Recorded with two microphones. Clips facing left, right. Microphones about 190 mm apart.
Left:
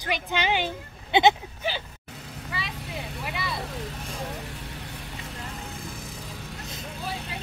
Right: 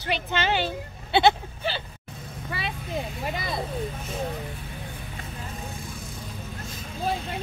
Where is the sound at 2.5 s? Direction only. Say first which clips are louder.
Right 3 dB; 60° right (ahead or behind).